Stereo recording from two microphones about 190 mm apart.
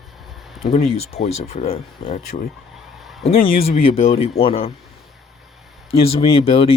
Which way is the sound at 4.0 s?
35° left (ahead or behind).